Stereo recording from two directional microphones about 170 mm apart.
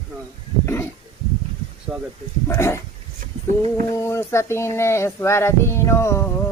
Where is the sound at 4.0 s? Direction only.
15° left (ahead or behind).